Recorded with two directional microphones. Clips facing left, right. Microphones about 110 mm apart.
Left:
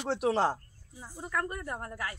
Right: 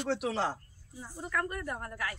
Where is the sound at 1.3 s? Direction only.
20° left (ahead or behind).